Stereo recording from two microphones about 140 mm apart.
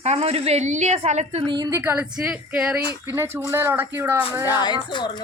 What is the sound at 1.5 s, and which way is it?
Speech, 25° right (ahead or behind).